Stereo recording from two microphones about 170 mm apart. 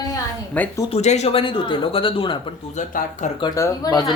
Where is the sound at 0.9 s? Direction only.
40° left (ahead or behind).